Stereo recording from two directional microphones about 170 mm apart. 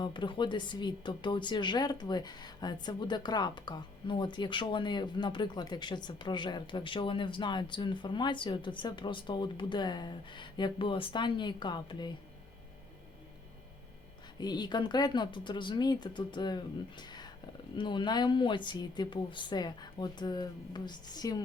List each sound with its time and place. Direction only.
0.0 s speech: 30° left (ahead or behind)
14.3 s speech: 25° left (ahead or behind)